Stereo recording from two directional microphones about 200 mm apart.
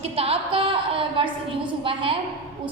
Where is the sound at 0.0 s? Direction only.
30° right (ahead or behind).